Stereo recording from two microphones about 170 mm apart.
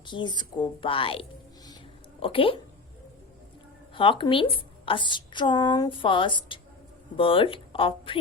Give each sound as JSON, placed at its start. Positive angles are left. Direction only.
{"t": 0.0, "sound": "a woman's voice", "side_deg": 30}
{"t": 3.9, "sound": "a woman's voice", "side_deg": 30}